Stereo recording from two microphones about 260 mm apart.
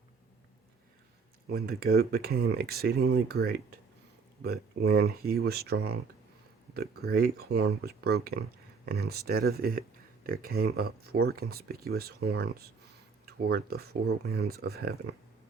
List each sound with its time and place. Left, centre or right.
1.5 s speech: right